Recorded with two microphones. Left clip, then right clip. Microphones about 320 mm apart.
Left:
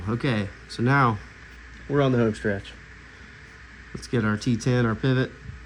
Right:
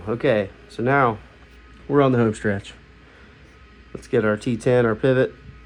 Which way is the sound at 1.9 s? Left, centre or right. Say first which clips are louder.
Right 5 dB; right.